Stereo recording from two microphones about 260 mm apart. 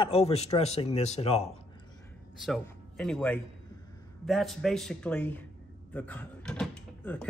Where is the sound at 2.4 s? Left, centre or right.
Centre.